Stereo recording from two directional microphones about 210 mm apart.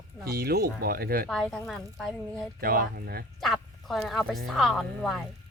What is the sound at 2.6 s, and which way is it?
Speech, 45° right (ahead or behind).